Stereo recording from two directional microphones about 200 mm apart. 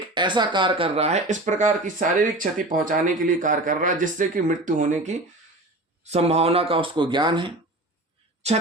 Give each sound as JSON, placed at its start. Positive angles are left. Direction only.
{"t": 0.1, "sound": "speech", "side_deg": -25}
{"t": 6.1, "sound": "speech", "side_deg": -30}